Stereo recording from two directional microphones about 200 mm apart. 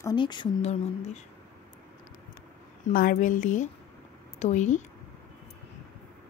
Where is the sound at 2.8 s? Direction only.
45° left (ahead or behind).